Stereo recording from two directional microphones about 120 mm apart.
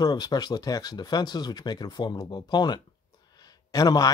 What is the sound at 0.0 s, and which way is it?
Speech, 35° left (ahead or behind).